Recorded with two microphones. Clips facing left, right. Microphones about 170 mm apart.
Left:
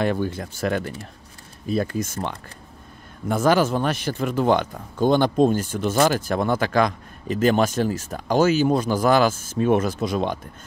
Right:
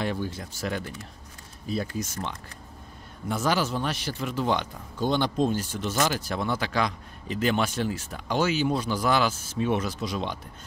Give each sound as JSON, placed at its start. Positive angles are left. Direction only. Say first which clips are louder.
{"t": 0.0, "sound": "a man's voice", "louder": "left 7 dB", "side_deg": 55}